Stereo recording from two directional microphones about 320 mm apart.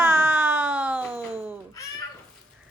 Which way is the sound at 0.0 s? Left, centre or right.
Centre.